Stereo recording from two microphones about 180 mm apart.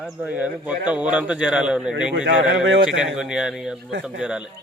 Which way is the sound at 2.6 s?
90° right.